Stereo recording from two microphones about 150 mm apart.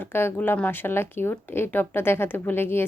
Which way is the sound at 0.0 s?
15° left (ahead or behind).